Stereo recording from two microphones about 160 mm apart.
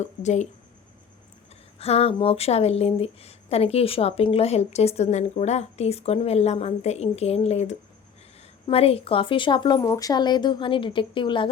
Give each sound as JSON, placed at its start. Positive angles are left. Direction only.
{"t": 0.0, "sound": "speech", "side_deg": 45}
{"t": 1.8, "sound": "speech", "side_deg": 40}